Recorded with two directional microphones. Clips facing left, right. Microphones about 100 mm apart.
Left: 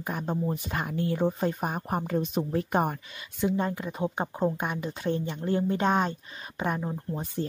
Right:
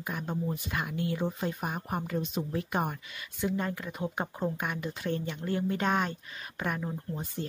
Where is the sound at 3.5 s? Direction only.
25° left (ahead or behind).